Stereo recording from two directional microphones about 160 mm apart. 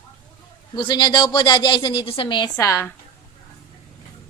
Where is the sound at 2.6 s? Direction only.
15° left (ahead or behind).